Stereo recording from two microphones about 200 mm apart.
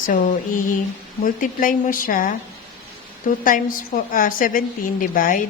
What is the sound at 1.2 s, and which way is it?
A woman's voice, 45° left (ahead or behind).